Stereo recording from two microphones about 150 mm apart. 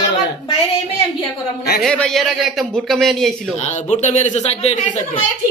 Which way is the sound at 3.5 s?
55° left (ahead or behind).